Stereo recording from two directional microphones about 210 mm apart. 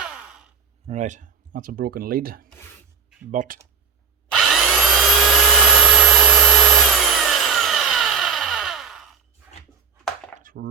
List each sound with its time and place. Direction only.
0.0 s sigh: 5° right (ahead or behind)
0.9 s speech: 35° right (ahead or behind)
4.3 s vacuum cleaner: centre (ahead or behind)
10.0 s a sound: centre (ahead or behind)
10.3 s chopping: 40° right (ahead or behind)